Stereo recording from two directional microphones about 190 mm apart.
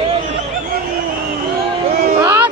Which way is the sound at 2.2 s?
10° right (ahead or behind).